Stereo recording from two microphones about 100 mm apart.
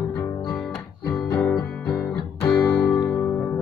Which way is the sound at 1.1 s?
10° left (ahead or behind).